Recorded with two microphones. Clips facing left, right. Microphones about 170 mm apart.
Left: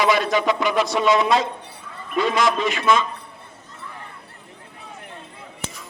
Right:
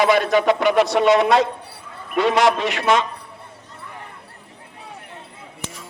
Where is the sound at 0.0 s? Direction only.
55° right (ahead or behind); by 3.1 s 70° right (ahead or behind).